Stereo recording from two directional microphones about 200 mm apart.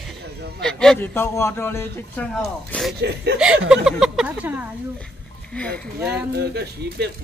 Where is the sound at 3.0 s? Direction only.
55° right (ahead or behind).